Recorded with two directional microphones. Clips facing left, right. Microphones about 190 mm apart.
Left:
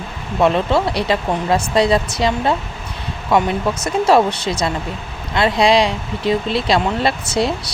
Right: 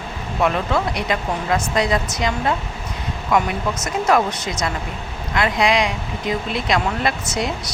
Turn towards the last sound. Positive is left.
turn(degrees=30)  # may be behind; listen again after turning